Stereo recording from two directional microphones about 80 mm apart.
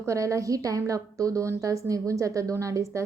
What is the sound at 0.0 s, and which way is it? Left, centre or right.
A woman's voice, right.